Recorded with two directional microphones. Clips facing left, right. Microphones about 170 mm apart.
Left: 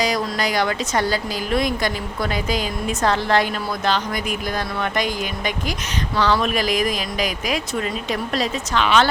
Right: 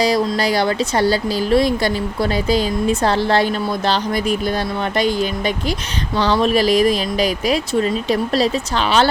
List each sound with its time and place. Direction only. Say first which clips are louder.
0.0 s speech: right 5 dB; 30° right (ahead or behind)